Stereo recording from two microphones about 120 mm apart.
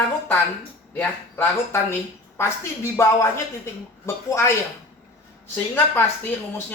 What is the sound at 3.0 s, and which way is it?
Speech, 20° left (ahead or behind).